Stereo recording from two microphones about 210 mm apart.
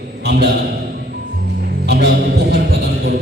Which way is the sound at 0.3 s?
50° right (ahead or behind).